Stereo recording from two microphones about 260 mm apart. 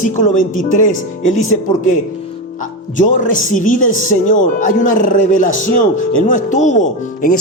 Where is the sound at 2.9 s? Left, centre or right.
Left.